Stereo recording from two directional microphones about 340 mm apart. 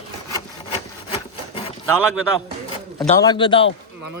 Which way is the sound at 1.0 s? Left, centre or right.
Centre.